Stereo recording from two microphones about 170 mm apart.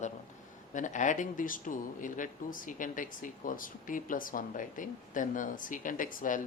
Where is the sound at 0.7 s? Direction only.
50° left (ahead or behind).